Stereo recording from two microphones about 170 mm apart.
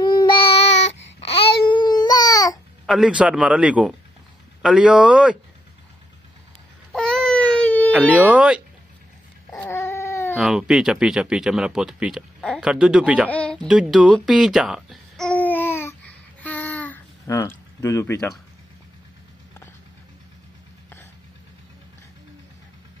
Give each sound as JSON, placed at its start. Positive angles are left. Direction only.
{"t": 0.0, "sound": "babbling", "side_deg": 25}
{"t": 2.9, "sound": "a man's voice", "side_deg": -5}
{"t": 6.9, "sound": "baby cry", "side_deg": 5}
{"t": 7.9, "sound": "a man's voice", "side_deg": -10}
{"t": 9.6, "sound": "dog", "side_deg": 15}
{"t": 10.3, "sound": "speech", "side_deg": -5}
{"t": 13.3, "sound": "a sound", "side_deg": 5}